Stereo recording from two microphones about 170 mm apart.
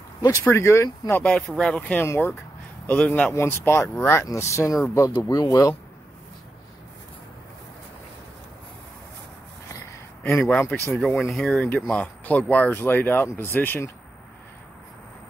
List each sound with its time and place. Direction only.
0.2 s speech: 20° left (ahead or behind)
1.2 s speech: 5° left (ahead or behind); by 5.8 s 20° left (ahead or behind)
11.0 s speech: centre (ahead or behind)